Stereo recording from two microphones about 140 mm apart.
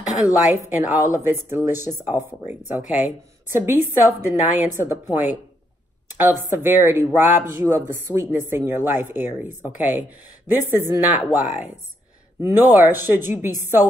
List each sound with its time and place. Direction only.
0.2 s a woman's voice: 10° right (ahead or behind)
6.1 s speech: 15° right (ahead or behind)